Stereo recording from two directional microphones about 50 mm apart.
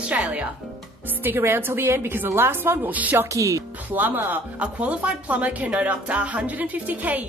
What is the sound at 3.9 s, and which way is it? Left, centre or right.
Speech, right.